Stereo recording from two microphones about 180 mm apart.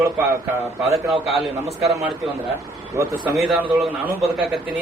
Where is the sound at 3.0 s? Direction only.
15° right (ahead or behind).